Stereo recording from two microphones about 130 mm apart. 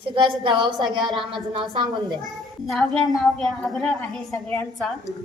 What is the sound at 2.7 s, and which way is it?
A woman's voice, centre (ahead or behind).